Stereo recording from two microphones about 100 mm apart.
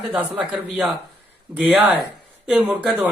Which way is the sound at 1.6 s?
15° right (ahead or behind).